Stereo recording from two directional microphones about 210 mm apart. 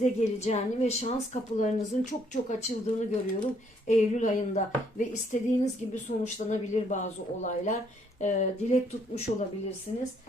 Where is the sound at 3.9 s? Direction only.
35° left (ahead or behind).